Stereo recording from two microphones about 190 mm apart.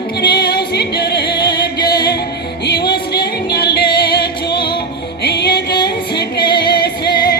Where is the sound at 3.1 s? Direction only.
55° left (ahead or behind).